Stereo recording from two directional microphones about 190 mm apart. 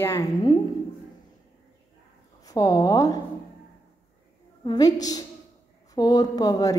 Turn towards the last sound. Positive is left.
turn(degrees=20)  # may be behind; listen again after turning